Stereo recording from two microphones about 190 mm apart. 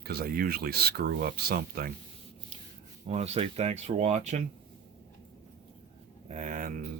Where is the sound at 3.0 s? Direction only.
35° right (ahead or behind).